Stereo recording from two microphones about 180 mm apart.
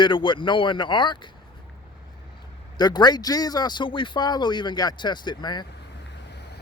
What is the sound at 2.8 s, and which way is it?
Speech, 25° left (ahead or behind).